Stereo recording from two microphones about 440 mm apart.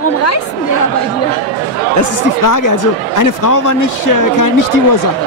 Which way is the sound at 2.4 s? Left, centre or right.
Left.